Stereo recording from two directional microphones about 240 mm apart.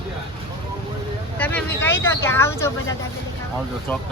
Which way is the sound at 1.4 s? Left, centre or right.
Centre.